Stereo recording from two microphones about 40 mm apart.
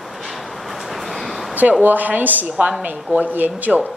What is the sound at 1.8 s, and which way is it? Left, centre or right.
A woman's voice, right.